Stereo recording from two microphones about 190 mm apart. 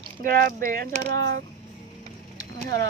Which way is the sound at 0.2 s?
50° right (ahead or behind).